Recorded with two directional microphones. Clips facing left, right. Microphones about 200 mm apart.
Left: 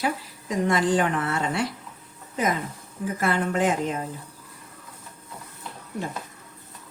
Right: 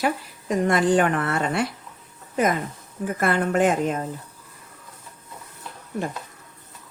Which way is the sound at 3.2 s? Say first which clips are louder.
Right 3 dB; 55° right (ahead or behind).